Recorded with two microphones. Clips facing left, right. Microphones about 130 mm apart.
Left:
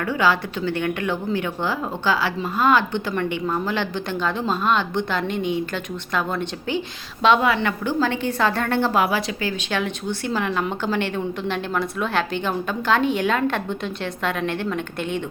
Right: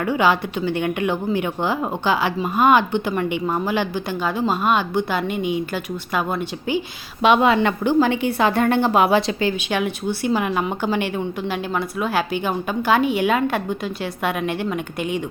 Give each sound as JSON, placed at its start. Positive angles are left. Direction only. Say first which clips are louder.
{"t": 0.0, "sound": "a woman's voice", "louder": "right 2 dB", "side_deg": -15}
{"t": 7.4, "sound": "a woman's voice", "louder": "right 4 dB", "side_deg": -25}
{"t": 9.6, "sound": "a woman's voice", "louder": "right 3 dB", "side_deg": -15}